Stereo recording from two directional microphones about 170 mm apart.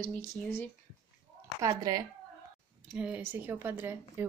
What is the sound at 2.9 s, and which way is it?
Speech, 5° right (ahead or behind).